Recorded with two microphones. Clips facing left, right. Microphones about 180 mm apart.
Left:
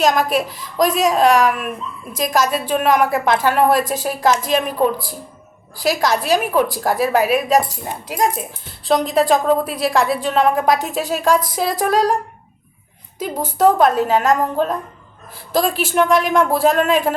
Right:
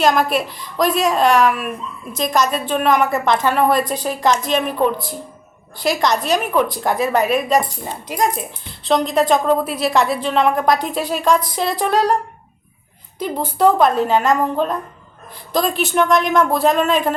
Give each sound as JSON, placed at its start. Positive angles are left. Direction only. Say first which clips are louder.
{"t": 0.0, "sound": "a woman's voice", "louder": "even", "side_deg": 0}
{"t": 13.1, "sound": "a woman's voice", "louder": "even", "side_deg": 5}